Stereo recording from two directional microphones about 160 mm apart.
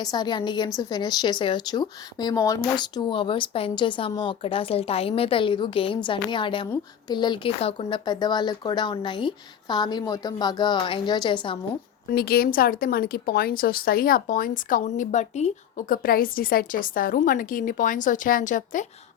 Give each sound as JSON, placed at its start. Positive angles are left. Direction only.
{"t": 0.0, "sound": "speech", "side_deg": 25}
{"t": 12.1, "sound": "a woman's voice", "side_deg": 75}
{"t": 15.9, "sound": "a woman's voice", "side_deg": 65}